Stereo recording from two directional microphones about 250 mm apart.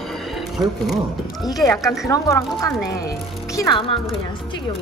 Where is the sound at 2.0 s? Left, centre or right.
Centre.